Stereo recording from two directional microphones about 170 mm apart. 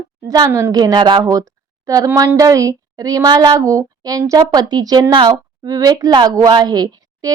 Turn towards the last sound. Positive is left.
turn(degrees=-20)  # may be behind; listen again after turning